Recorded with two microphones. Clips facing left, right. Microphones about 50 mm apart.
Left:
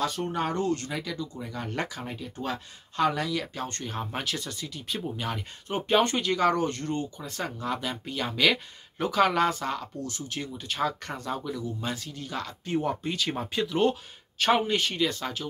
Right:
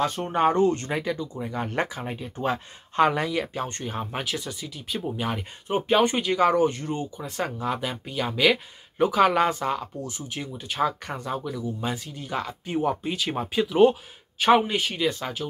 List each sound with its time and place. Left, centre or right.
0.0 s speech: right; by 15.4 s centre